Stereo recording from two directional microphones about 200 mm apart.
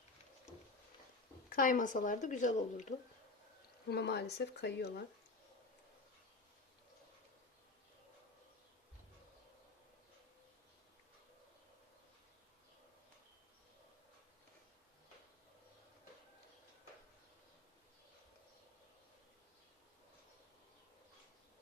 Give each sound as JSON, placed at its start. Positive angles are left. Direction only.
{"t": 1.5, "sound": "speech", "side_deg": 45}
{"t": 3.8, "sound": "speech", "side_deg": 55}